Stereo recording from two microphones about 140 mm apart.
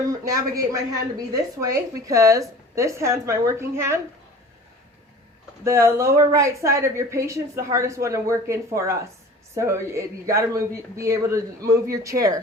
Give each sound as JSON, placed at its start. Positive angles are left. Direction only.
{"t": 0.1, "sound": "a woman's voice", "side_deg": -25}
{"t": 5.6, "sound": "a woman's voice", "side_deg": -20}